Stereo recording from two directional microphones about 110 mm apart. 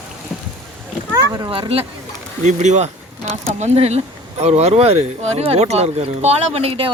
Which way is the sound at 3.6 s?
75° right (ahead or behind).